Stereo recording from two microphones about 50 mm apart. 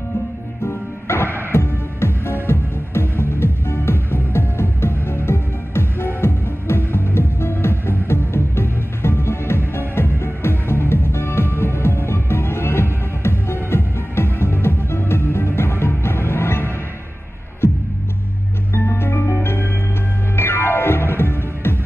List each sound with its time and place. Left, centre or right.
0.7 s music: left